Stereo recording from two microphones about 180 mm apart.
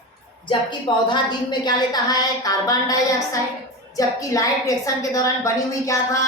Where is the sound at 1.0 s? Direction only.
25° left (ahead or behind).